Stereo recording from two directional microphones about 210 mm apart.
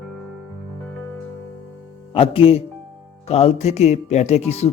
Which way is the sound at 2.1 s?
25° left (ahead or behind).